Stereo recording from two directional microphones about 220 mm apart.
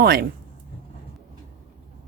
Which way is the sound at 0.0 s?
45° right (ahead or behind).